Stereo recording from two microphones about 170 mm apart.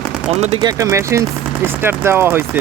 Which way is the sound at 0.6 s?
20° right (ahead or behind).